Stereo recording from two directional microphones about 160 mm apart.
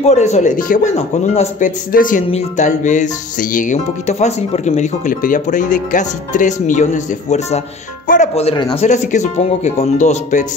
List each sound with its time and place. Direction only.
0.0 s music: 45° left (ahead or behind)
1.9 s speech: 60° left (ahead or behind)
2.2 s music: 45° left (ahead or behind)
8.1 s speech: 45° left (ahead or behind)
8.7 s music: 45° left (ahead or behind)